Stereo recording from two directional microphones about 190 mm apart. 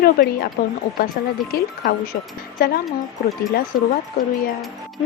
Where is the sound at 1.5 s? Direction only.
55° left (ahead or behind).